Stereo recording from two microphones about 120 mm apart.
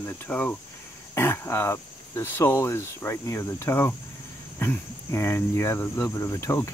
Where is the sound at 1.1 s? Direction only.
20° left (ahead or behind).